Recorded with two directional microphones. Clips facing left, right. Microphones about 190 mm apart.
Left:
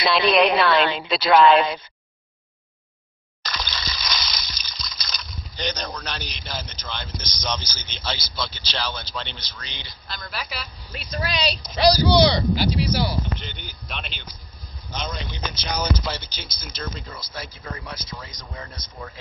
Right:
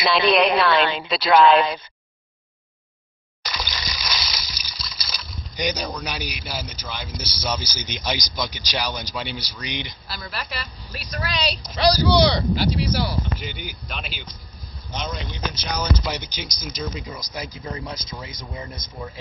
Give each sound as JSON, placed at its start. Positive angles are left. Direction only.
{"t": 0.0, "sound": "speech", "side_deg": 0}
{"t": 3.4, "sound": "water", "side_deg": -10}
{"t": 5.9, "sound": "a man's voice", "side_deg": -10}
{"t": 10.0, "sound": "speech", "side_deg": -5}
{"t": 10.9, "sound": "speech", "side_deg": 25}
{"t": 12.1, "sound": "a man's voice", "side_deg": 0}